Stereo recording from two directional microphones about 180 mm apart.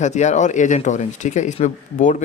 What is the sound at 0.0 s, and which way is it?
Speech, 40° left (ahead or behind).